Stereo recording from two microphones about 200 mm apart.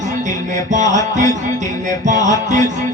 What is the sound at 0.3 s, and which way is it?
Music, 40° right (ahead or behind).